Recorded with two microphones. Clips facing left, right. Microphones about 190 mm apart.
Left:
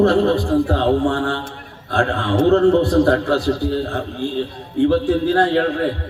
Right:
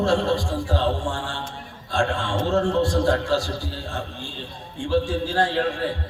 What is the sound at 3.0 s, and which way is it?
Speech, 60° left (ahead or behind).